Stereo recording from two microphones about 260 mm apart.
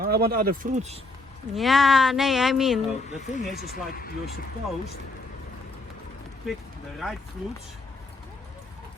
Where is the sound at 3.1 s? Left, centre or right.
Left.